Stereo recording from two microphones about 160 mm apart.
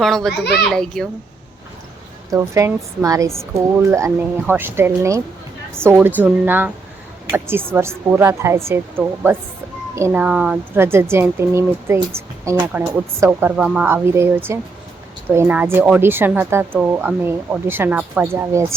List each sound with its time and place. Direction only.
0.0 s a child's voice: centre (ahead or behind)
2.3 s a woman's voice: 20° right (ahead or behind)